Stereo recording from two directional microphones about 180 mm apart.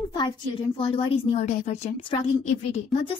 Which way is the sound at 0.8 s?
35° left (ahead or behind).